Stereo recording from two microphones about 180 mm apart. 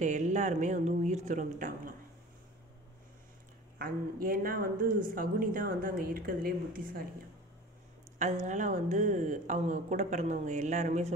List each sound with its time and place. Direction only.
0.0 s a woman's voice: 40° right (ahead or behind)
3.7 s a woman's voice: 55° right (ahead or behind)
8.2 s speech: 40° right (ahead or behind)